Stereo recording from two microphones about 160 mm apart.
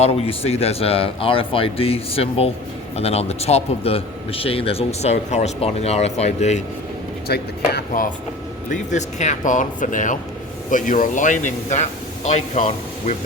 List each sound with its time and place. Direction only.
0.0 s a man's voice: 40° left (ahead or behind)
7.3 s speech: 90° left
8.7 s speech: 50° left (ahead or behind)